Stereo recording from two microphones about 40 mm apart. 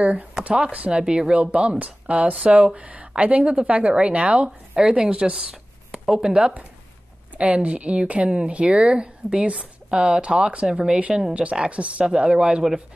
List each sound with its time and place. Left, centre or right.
0.0 s speech: right
1.0 s speech: right